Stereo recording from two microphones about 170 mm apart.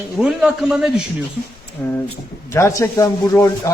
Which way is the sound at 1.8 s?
15° left (ahead or behind).